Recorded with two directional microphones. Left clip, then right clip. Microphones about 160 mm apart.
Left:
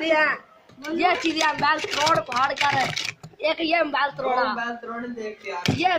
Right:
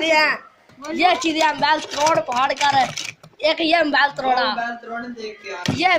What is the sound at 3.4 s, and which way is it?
A woman's voice, 20° right (ahead or behind).